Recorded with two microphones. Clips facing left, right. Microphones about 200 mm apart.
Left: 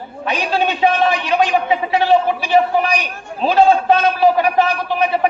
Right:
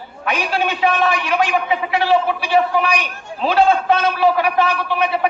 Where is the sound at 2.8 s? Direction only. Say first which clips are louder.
Left 1 dB; 40° left (ahead or behind).